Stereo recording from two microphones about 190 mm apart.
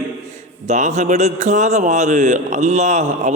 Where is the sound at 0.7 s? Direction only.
35° right (ahead or behind).